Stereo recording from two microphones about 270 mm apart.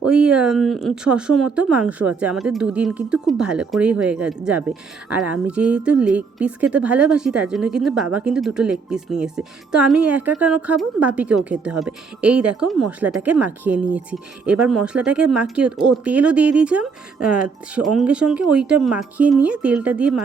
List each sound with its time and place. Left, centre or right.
0.0 s speech: centre